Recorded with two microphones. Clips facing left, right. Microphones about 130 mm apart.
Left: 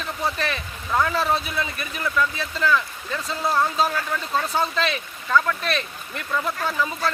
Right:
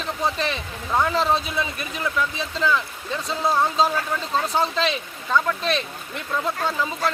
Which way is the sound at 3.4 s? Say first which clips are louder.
Right 1 dB; 20° right (ahead or behind).